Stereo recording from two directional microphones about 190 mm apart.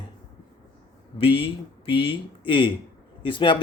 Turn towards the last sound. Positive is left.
turn(degrees=25)  # may be behind; listen again after turning